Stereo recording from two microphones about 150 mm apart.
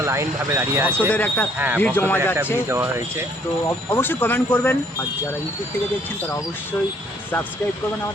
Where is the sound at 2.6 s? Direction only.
15° right (ahead or behind).